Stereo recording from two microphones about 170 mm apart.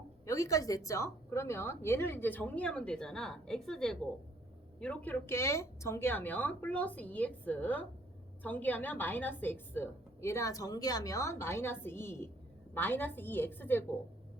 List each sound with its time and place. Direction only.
0.3 s a woman's voice: 20° left (ahead or behind)